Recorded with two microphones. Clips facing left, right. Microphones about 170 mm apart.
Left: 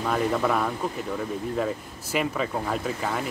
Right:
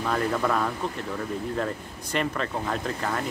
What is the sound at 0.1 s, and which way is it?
Speech, 5° left (ahead or behind).